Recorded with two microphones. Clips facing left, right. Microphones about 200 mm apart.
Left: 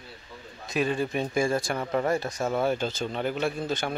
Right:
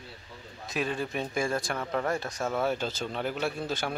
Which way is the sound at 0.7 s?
Centre (ahead or behind).